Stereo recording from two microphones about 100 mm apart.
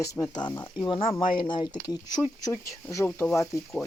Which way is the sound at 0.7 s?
50° left (ahead or behind).